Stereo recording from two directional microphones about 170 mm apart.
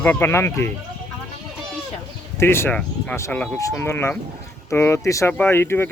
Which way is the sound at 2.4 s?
15° left (ahead or behind).